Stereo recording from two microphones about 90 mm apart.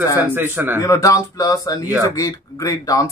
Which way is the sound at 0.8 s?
40° left (ahead or behind).